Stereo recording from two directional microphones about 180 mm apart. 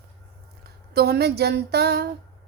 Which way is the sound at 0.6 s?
60° right (ahead or behind).